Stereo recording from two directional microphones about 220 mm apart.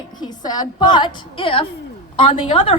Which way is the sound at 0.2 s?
20° left (ahead or behind).